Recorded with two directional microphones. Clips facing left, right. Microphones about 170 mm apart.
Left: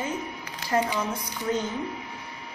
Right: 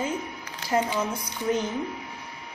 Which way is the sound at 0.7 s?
10° right (ahead or behind).